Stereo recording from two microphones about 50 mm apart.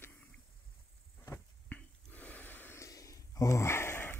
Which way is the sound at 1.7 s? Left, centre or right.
Left.